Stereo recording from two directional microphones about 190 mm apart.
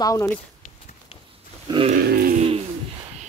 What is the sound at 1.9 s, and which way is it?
Sheep, 50° right (ahead or behind).